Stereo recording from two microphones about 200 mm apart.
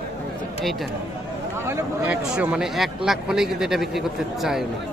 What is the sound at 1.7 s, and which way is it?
A man's voice, 10° right (ahead or behind).